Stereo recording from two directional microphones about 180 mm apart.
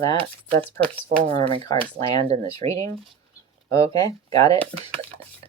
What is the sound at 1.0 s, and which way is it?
Speech, 35° right (ahead or behind).